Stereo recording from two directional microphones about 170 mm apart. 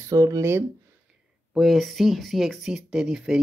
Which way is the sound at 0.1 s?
20° right (ahead or behind).